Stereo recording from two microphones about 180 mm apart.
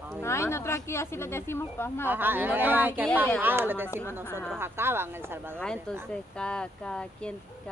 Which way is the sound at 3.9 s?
15° left (ahead or behind).